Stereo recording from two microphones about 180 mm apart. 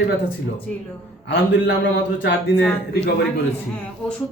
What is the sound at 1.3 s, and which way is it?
Mantra, 75° left (ahead or behind).